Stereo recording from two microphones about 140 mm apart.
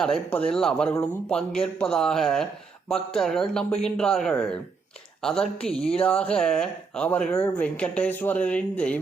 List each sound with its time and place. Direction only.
0.0 s speech: 10° left (ahead or behind)